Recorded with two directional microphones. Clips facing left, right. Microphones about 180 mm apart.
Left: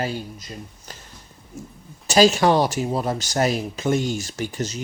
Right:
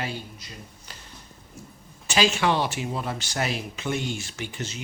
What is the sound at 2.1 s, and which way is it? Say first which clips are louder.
Speech: left 7 dB; 40° left (ahead or behind).